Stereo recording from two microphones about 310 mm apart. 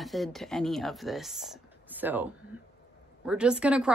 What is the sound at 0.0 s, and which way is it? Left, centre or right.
Speech, centre.